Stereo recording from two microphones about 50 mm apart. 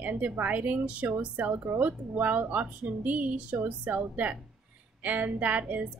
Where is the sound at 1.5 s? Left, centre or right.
Right.